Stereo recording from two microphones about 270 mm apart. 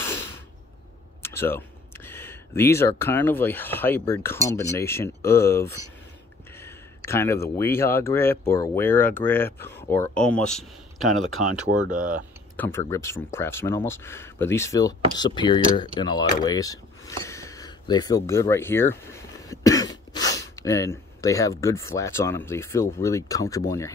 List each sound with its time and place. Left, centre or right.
0.0 s a sound: centre
1.2 s a man's voice: centre
11.9 s speech: right
12.5 s speech: centre